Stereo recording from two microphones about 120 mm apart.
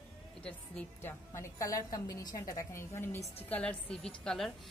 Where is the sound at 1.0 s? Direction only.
25° left (ahead or behind); by 4.5 s 5° left (ahead or behind).